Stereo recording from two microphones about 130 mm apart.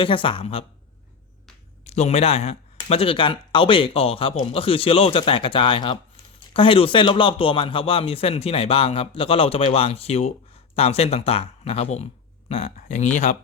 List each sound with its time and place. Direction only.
0.0 s speech: 40° left (ahead or behind)
1.8 s a man's voice: 60° left (ahead or behind)